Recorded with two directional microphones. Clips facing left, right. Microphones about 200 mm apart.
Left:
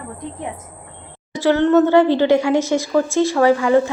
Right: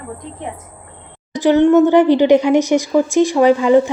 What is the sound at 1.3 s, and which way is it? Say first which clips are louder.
Speech: right 3 dB; 15° right (ahead or behind).